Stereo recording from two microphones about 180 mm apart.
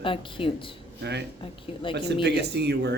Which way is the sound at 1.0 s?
70° right (ahead or behind).